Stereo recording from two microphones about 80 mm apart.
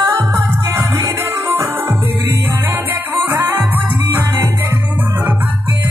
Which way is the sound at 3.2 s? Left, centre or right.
Right.